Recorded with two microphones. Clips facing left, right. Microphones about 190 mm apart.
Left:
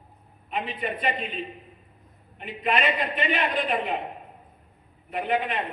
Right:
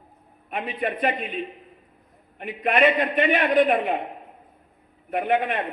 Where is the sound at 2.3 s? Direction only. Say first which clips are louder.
Right 5 dB; 55° right (ahead or behind).